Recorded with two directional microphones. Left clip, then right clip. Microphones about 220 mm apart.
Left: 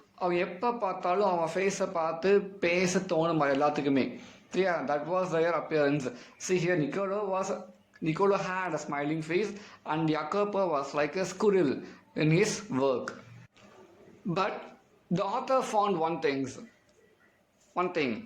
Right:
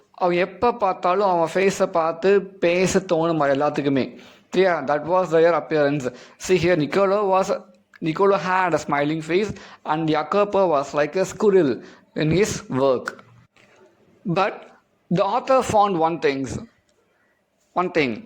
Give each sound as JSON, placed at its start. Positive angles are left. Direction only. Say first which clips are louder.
{"t": 0.2, "sound": "a man's voice", "louder": "right 10 dB", "side_deg": -35}
{"t": 14.3, "sound": "a man's voice", "louder": "right 9 dB", "side_deg": -35}
{"t": 17.7, "sound": "a man's voice", "louder": "right 9 dB", "side_deg": -35}